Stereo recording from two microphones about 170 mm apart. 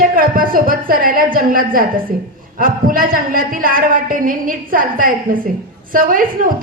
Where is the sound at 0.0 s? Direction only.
55° right (ahead or behind).